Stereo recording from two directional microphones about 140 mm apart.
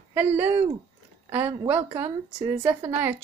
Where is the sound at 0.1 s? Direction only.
15° right (ahead or behind).